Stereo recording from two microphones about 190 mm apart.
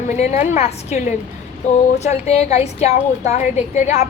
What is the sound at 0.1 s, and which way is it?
A woman's voice, 40° left (ahead or behind).